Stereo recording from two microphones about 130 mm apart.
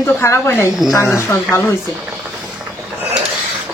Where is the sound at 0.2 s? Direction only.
20° left (ahead or behind).